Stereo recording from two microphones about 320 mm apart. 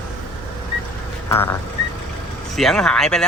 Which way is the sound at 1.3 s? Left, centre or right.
Centre.